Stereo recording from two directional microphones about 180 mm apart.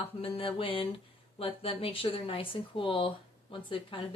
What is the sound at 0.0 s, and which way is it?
Speech, 30° left (ahead or behind).